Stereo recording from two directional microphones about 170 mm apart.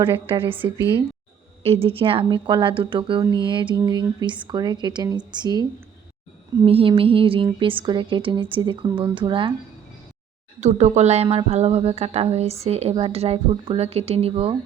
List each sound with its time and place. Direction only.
0.0 s a woman's voice: 30° right (ahead or behind)
1.6 s a woman's voice: 35° right (ahead or behind)
10.6 s a woman's voice: 40° right (ahead or behind)